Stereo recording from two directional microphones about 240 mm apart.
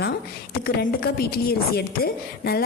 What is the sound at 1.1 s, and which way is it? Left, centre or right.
A woman's voice, left.